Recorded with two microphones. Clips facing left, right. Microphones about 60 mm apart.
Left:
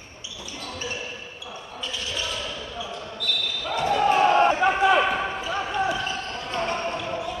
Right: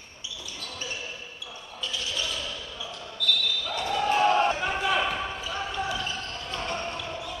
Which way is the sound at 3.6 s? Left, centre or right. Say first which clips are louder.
Left 8 dB; left.